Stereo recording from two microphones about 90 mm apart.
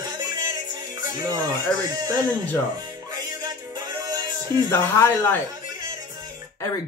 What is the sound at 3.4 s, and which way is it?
Music, 50° right (ahead or behind).